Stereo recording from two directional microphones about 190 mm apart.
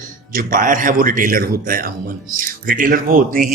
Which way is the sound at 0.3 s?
45° right (ahead or behind).